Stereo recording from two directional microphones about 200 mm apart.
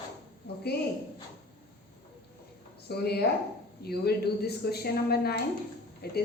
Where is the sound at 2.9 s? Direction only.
55° left (ahead or behind).